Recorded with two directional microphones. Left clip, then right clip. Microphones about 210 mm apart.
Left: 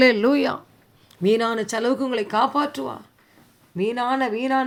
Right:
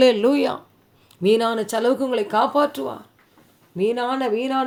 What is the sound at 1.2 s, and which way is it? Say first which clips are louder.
Speech: right 2 dB; 30° left (ahead or behind).